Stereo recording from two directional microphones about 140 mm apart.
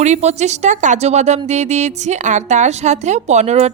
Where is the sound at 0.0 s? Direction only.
55° right (ahead or behind).